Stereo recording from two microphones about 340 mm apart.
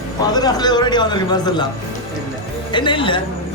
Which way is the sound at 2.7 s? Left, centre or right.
Centre.